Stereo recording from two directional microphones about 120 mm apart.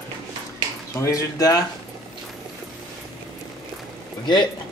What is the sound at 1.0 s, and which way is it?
Speech, 25° left (ahead or behind).